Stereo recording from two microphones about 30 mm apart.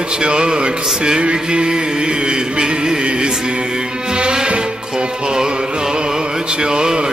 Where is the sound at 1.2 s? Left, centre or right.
Right.